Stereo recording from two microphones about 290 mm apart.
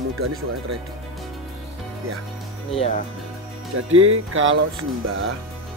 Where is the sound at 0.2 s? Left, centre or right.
Right.